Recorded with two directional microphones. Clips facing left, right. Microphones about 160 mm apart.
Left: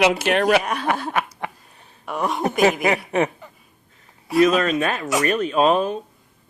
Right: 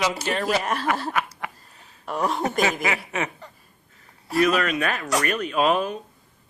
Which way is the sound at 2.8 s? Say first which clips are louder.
Left 7 dB; 40° left (ahead or behind).